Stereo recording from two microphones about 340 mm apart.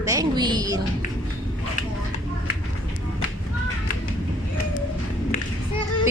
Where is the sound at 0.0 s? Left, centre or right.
Centre.